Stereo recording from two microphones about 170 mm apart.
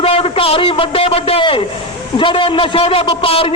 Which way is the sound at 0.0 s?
35° left (ahead or behind).